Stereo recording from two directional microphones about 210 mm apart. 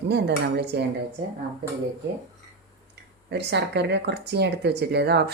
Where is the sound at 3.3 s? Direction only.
55° right (ahead or behind).